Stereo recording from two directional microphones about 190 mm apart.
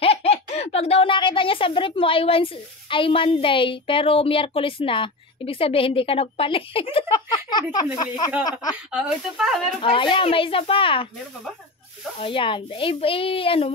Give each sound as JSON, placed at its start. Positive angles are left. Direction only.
{"t": 0.0, "sound": "speech", "side_deg": 30}
{"t": 8.9, "sound": "speech", "side_deg": 0}
{"t": 9.8, "sound": "speech", "side_deg": 25}
{"t": 12.2, "sound": "speech", "side_deg": 25}